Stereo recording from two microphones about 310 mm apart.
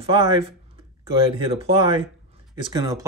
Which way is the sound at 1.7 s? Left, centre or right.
Centre.